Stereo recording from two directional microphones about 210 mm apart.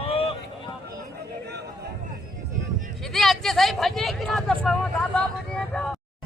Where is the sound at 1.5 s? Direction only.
50° right (ahead or behind).